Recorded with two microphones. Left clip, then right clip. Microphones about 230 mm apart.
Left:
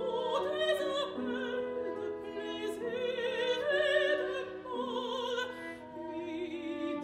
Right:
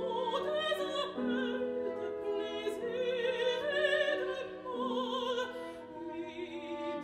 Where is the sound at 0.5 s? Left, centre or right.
Left.